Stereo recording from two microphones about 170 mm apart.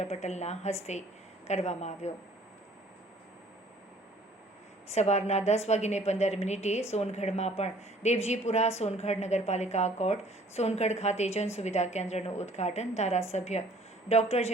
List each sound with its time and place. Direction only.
0.0 s speech: 40° left (ahead or behind)
4.9 s speech: 40° left (ahead or behind)